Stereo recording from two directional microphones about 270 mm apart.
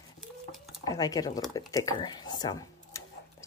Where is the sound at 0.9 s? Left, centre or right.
Centre.